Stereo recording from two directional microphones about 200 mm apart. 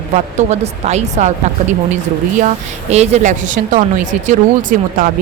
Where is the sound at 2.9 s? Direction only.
35° right (ahead or behind).